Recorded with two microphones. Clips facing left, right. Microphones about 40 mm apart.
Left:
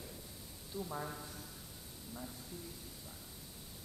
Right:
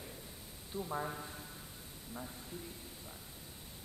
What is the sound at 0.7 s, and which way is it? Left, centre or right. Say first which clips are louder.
Speech: right 3 dB; centre.